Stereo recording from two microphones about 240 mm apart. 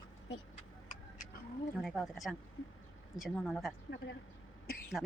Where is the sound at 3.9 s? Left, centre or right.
Left.